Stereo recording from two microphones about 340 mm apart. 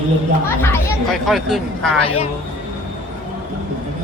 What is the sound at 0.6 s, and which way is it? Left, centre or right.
Speech, centre.